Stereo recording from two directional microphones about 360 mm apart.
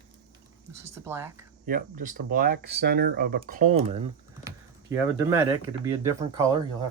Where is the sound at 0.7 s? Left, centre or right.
Centre.